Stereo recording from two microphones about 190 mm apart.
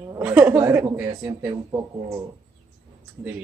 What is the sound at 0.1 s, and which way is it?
A woman's voice, 10° right (ahead or behind).